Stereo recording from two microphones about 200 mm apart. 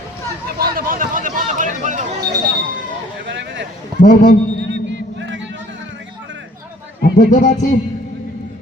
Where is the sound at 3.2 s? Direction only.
60° right (ahead or behind).